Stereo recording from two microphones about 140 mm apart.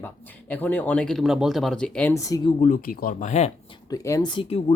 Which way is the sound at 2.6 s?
75° left (ahead or behind).